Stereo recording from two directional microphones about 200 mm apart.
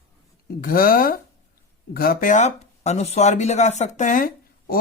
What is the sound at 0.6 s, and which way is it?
A woman's voice, 45° left (ahead or behind).